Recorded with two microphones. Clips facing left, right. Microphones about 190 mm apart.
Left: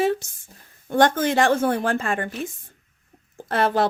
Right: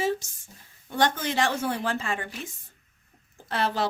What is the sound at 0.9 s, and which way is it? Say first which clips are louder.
Speech: left 7 dB; 50° left (ahead or behind).